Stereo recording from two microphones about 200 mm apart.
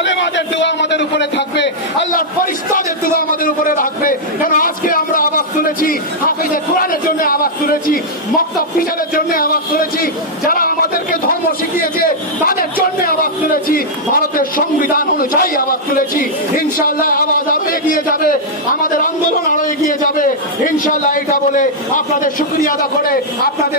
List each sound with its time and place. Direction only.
0.0 s a man's voice: 65° left (ahead or behind)
3.2 s a man's voice: 45° left (ahead or behind)